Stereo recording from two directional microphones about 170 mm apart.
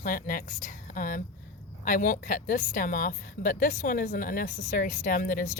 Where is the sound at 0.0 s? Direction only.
55° left (ahead or behind).